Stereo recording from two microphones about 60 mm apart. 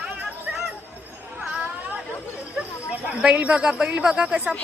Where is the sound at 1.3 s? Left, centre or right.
Centre.